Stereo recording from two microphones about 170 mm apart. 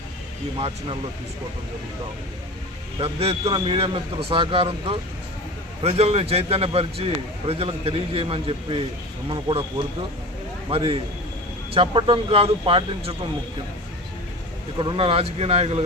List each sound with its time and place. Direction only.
3.0 s a man's voice: 35° right (ahead or behind)
10.7 s a man's voice: 30° right (ahead or behind)
14.8 s a man's voice: 30° right (ahead or behind)